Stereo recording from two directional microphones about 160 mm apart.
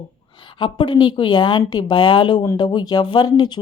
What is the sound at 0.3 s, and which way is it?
A woman's voice, 30° left (ahead or behind).